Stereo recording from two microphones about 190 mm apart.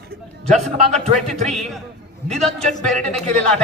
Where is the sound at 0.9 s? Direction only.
35° right (ahead or behind).